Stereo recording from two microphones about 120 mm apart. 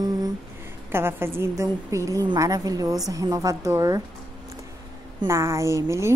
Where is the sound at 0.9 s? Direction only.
20° right (ahead or behind).